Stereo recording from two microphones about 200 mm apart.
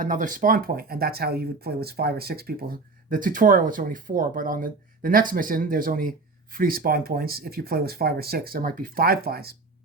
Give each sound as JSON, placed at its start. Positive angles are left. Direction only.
{"t": 0.0, "sound": "speech", "side_deg": -40}